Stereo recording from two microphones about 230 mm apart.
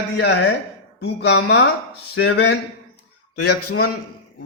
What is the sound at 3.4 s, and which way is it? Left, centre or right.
Speech, left.